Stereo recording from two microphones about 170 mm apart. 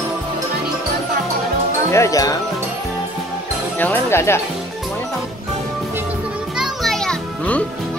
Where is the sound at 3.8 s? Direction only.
10° left (ahead or behind).